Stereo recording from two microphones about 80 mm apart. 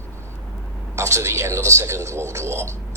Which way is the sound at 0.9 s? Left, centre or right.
Right.